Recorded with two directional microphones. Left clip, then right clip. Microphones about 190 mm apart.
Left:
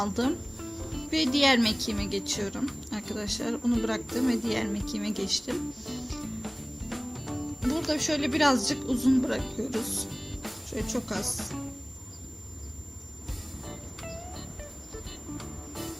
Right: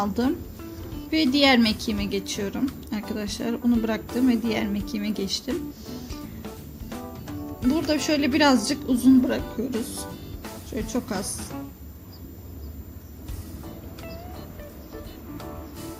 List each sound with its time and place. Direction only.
0.0 s speech: 15° left (ahead or behind)
7.6 s speech: centre (ahead or behind)
13.7 s music: centre (ahead or behind)